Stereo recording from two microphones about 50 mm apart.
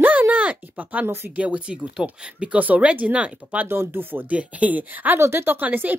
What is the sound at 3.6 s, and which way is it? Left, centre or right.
Speech, right.